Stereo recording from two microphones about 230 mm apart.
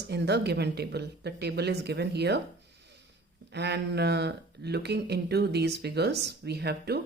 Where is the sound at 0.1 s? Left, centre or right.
Right.